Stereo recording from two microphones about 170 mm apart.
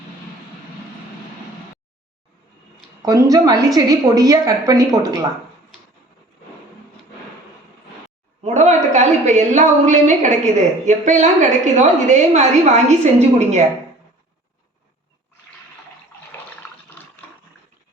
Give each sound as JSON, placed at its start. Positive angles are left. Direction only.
{"t": 3.0, "sound": "a woman's voice", "side_deg": -20}
{"t": 8.4, "sound": "a woman's voice", "side_deg": -40}